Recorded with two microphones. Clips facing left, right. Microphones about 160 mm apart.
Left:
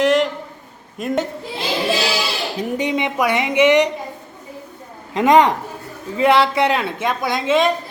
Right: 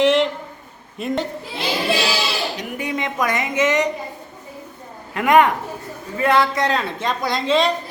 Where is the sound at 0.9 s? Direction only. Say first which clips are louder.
Left 2 dB; centre (ahead or behind).